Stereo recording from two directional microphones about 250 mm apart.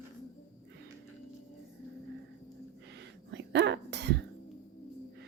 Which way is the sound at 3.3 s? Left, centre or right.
Right.